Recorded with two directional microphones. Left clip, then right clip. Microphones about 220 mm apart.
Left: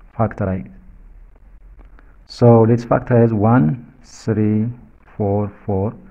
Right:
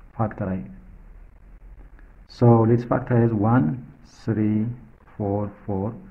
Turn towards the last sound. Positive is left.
turn(degrees=30)  # may be behind; listen again after turning